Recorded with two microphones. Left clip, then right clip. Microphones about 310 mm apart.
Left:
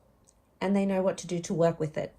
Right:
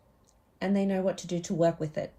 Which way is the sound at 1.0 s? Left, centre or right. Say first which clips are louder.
Left 1 dB; centre.